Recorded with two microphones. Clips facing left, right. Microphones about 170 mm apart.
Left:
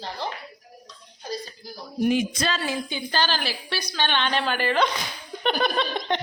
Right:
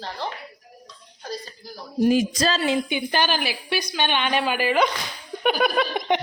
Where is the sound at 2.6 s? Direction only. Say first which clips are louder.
Right 6 dB; 20° right (ahead or behind).